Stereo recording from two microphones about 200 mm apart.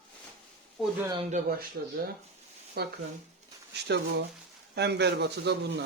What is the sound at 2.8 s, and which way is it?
Speech, 50° right (ahead or behind).